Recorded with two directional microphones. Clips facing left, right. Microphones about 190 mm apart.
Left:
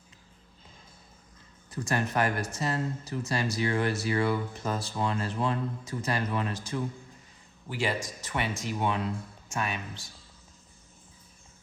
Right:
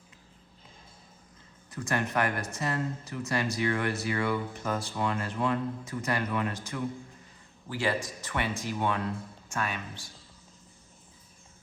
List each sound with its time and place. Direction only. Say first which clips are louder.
1.7 s speech: left 1 dB; 30° left (ahead or behind)